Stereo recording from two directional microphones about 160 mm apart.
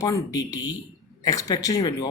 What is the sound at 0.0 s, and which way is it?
Speech, 20° left (ahead or behind).